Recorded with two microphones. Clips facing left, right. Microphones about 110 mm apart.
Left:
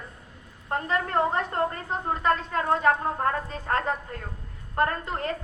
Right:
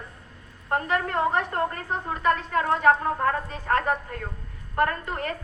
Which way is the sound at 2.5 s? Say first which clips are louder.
Right 4 dB; 30° left (ahead or behind).